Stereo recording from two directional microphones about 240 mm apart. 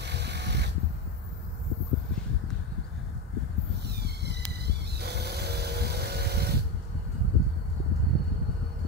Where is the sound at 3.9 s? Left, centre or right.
Right.